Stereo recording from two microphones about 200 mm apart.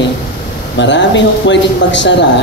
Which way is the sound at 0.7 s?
65° left (ahead or behind).